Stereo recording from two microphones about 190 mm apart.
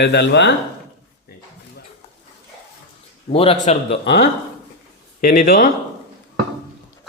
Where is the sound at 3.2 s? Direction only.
30° left (ahead or behind).